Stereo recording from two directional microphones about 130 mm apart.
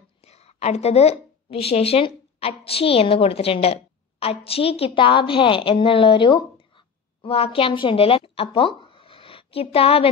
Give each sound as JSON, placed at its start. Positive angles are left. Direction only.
{"t": 0.2, "sound": "a woman's voice", "side_deg": 55}